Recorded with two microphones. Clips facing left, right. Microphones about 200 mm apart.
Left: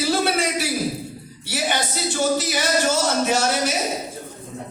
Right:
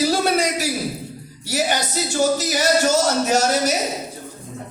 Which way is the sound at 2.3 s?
40° right (ahead or behind).